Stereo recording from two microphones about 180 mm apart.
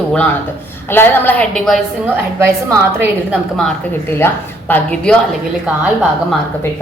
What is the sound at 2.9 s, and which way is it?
Speech, 15° right (ahead or behind).